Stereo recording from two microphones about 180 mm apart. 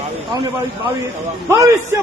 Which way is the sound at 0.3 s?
25° right (ahead or behind).